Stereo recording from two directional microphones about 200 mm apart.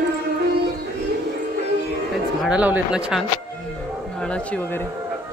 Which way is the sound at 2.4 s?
5° right (ahead or behind).